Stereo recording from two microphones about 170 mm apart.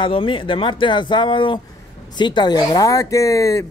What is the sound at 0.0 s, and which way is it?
Speech, 30° left (ahead or behind).